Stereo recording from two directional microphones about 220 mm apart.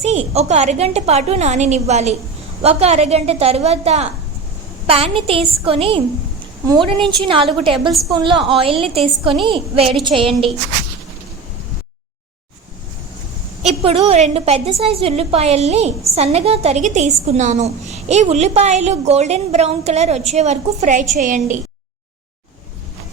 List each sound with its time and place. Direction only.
0.3 s a woman's voice: 30° right (ahead or behind)
13.6 s a woman's voice: 30° right (ahead or behind)